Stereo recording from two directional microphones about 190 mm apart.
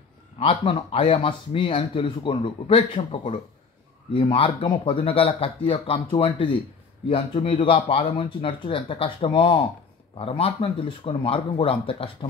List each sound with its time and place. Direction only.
0.4 s speech: 30° left (ahead or behind)